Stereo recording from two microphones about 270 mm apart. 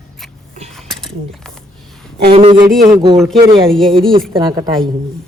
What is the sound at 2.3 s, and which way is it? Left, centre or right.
Speech, centre.